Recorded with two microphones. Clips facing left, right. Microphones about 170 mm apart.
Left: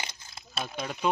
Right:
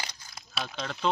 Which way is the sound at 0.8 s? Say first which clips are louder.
Left 2 dB; 10° left (ahead or behind).